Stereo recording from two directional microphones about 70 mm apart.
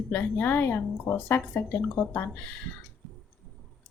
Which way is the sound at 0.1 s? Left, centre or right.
Left.